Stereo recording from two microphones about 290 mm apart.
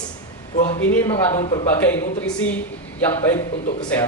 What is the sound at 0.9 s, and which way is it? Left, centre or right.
A woman's voice, centre.